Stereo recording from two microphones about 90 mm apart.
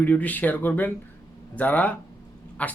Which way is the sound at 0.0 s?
20° left (ahead or behind).